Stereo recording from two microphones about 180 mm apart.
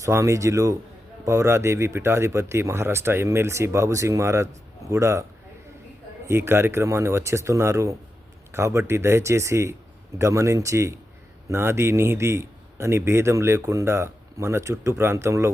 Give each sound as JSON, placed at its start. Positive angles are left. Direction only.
{"t": 0.0, "sound": "a man's voice", "side_deg": -15}
{"t": 6.2, "sound": "a man's voice", "side_deg": -15}